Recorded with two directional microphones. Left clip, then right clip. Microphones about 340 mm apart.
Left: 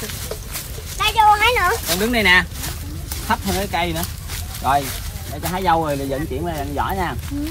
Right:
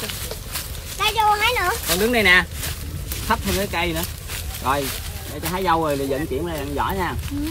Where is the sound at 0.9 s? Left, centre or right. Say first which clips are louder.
Left 4 dB; left.